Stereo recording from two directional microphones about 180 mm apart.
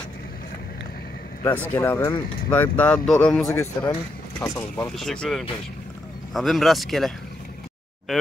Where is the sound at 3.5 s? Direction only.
15° left (ahead or behind).